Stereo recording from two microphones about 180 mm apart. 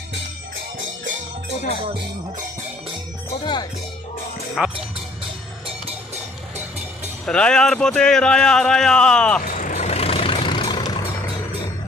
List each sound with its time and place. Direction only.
3.4 s speech: 25° left (ahead or behind)
4.6 s speech: centre (ahead or behind)
7.3 s speech: 5° left (ahead or behind)
9.5 s vehicle: 45° left (ahead or behind); by 10.9 s 25° left (ahead or behind)